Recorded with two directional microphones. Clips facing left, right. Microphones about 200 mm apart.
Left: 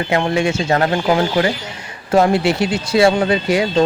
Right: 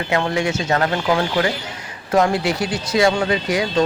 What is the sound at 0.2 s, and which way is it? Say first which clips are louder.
Speech: left 3 dB; 25° left (ahead or behind).